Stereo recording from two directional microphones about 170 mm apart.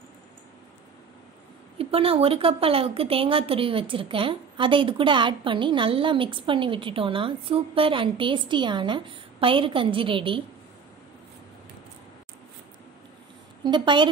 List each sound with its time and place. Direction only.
1.8 s a woman's voice: 35° right (ahead or behind)
13.7 s a woman's voice: 30° right (ahead or behind)